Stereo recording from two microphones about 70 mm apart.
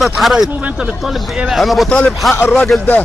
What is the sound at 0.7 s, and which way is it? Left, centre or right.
A man's voice, centre.